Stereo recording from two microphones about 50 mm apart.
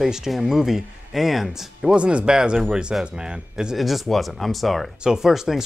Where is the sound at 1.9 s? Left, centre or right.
Right.